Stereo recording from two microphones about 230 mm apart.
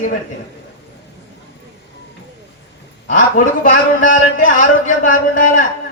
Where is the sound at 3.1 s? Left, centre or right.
Left.